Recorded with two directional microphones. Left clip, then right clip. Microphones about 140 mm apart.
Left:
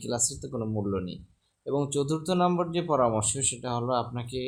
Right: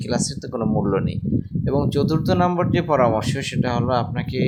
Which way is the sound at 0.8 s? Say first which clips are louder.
Right 10 dB; 35° right (ahead or behind).